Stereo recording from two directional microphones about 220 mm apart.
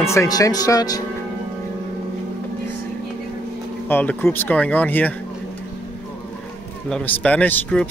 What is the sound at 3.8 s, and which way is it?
Speech, 10° left (ahead or behind).